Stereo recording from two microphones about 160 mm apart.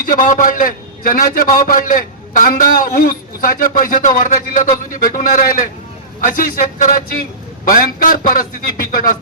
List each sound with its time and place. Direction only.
0.0 s a man's voice: 55° left (ahead or behind)